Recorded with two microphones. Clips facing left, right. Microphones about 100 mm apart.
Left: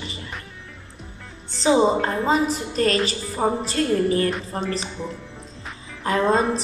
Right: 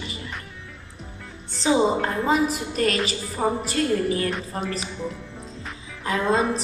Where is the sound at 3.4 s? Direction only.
20° left (ahead or behind).